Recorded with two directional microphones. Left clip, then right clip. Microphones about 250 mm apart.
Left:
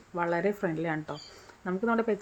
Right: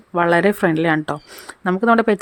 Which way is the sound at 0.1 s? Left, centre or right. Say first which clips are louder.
Right 13 dB; right.